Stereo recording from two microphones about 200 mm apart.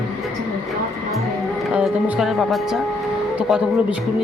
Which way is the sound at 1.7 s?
Centre (ahead or behind).